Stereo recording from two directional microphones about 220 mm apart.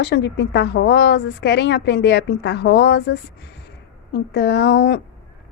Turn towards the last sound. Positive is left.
turn(degrees=50)  # may be behind; listen again after turning